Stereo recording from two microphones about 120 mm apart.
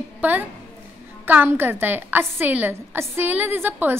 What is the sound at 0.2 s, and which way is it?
A woman's voice, 15° right (ahead or behind).